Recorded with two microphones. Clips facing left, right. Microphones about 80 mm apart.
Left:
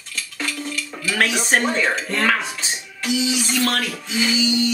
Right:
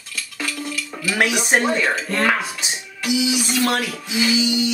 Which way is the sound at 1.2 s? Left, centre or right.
Centre.